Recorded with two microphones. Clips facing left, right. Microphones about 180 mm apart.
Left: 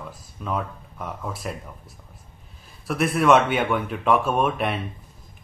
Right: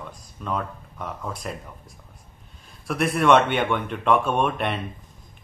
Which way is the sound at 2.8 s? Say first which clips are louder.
Left 1 dB; centre (ahead or behind).